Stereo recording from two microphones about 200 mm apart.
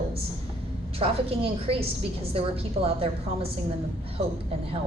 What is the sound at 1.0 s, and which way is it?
A woman's voice, 30° right (ahead or behind).